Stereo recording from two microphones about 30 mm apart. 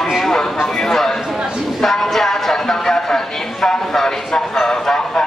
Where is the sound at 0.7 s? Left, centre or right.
Centre.